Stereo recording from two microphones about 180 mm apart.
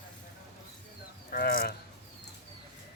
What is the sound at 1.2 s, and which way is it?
Speech, 55° left (ahead or behind).